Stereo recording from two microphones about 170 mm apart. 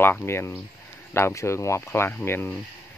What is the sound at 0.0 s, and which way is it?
Speech, 10° left (ahead or behind).